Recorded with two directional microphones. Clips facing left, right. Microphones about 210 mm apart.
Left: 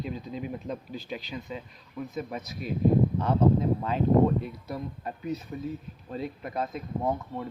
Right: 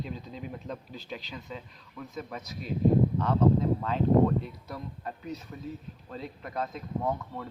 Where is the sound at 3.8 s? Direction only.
10° left (ahead or behind).